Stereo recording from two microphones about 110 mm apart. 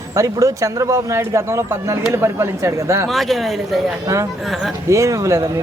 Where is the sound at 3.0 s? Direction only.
Centre (ahead or behind).